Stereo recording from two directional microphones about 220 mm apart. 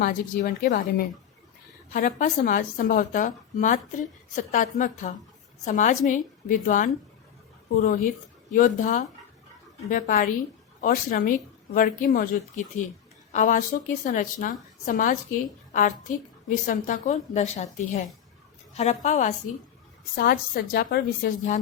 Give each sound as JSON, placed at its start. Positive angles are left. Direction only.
{"t": 0.0, "sound": "a woman's voice", "side_deg": 40}
{"t": 20.1, "sound": "a woman's voice", "side_deg": 45}